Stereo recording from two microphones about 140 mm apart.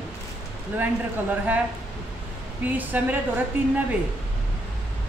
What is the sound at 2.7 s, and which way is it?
Speech, 10° right (ahead or behind).